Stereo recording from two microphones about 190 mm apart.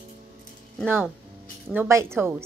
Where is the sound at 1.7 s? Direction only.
10° right (ahead or behind).